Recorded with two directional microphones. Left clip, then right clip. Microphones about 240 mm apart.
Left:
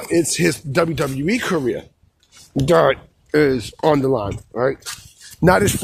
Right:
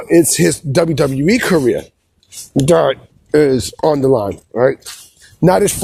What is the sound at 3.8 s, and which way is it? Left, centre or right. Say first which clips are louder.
Speech: right 4 dB; centre.